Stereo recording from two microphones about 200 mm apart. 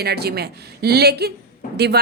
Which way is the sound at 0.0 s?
55° right (ahead or behind).